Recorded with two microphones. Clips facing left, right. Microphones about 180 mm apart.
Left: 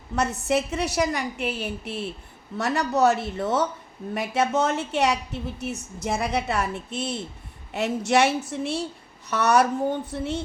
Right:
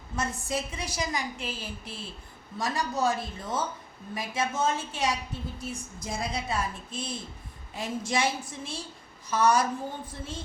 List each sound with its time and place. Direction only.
0.2 s a woman's voice: 70° left (ahead or behind)